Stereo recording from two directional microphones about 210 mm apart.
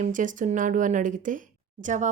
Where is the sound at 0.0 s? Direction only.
40° right (ahead or behind).